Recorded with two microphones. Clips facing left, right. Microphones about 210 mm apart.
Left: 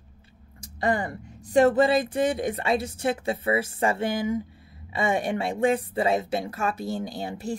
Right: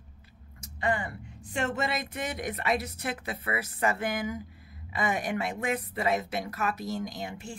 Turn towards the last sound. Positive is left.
turn(degrees=35)  # may be behind; listen again after turning